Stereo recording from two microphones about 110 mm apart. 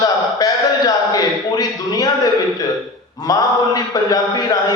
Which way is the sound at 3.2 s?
35° left (ahead or behind).